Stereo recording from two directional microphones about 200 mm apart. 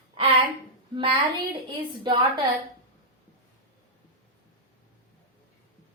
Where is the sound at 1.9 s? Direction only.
25° right (ahead or behind).